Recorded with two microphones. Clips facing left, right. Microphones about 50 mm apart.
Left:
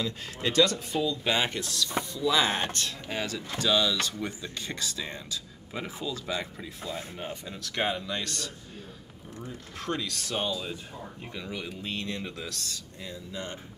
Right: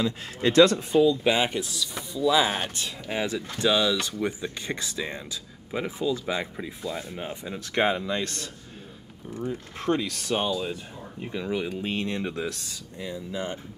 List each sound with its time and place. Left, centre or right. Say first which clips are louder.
0.4 s speech: right 6 dB; right
1.0 s speech: right 6 dB; centre; by 8.5 s right
9.5 s speech: right 7 dB; right